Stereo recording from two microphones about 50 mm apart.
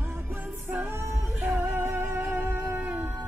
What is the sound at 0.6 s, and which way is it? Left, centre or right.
Music, right.